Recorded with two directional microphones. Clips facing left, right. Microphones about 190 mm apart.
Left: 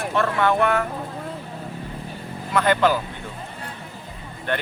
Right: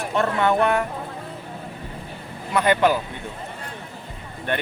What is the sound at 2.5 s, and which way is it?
Speech, 15° right (ahead or behind).